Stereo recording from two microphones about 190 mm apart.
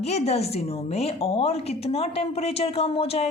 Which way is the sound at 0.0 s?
35° left (ahead or behind).